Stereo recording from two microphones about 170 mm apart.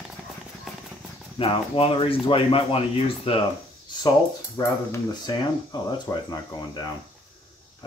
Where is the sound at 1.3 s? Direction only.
35° left (ahead or behind).